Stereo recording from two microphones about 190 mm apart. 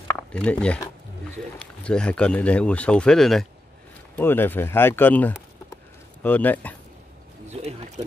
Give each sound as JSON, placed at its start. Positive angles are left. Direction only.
{"t": 0.1, "sound": "speech", "side_deg": 5}
{"t": 7.5, "sound": "speech", "side_deg": -30}